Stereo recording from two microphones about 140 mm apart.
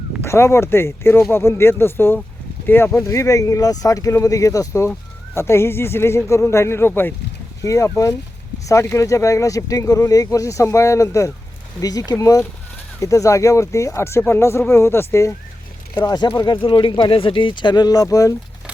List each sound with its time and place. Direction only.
0.2 s speech: 20° left (ahead or behind)
16.0 s speech: 30° left (ahead or behind)